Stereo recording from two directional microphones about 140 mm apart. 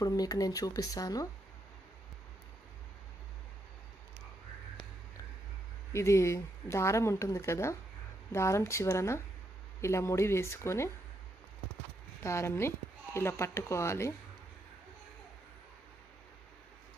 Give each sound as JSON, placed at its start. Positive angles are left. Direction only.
{"t": 0.0, "sound": "speech", "side_deg": 25}
{"t": 5.9, "sound": "speech", "side_deg": 20}
{"t": 12.2, "sound": "speech", "side_deg": 20}